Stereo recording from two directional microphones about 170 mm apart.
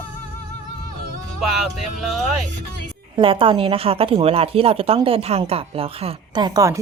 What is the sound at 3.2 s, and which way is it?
A woman's voice, 30° right (ahead or behind).